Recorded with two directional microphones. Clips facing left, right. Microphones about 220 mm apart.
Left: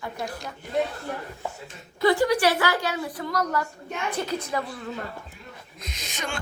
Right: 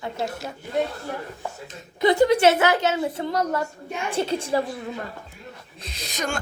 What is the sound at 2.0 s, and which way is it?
A woman's voice, 20° right (ahead or behind).